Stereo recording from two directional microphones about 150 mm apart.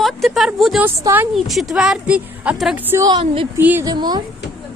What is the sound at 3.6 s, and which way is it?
Speech, 10° right (ahead or behind).